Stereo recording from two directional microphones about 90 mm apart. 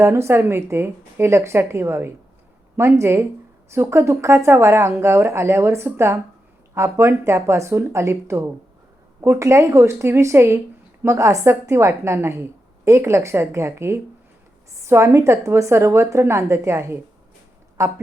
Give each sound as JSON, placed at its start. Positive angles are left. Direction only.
{"t": 0.0, "sound": "a woman's voice", "side_deg": -30}